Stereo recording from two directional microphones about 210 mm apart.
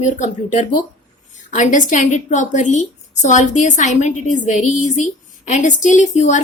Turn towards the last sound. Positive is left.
turn(degrees=35)  # may be behind; listen again after turning